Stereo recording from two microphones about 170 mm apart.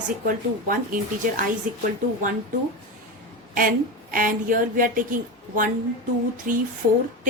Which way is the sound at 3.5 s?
55° right (ahead or behind).